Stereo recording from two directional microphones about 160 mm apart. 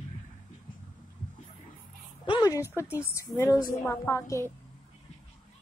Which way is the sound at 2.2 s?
25° left (ahead or behind).